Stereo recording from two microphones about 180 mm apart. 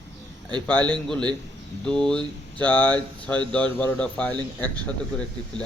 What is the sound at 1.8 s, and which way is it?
Speech, 5° left (ahead or behind).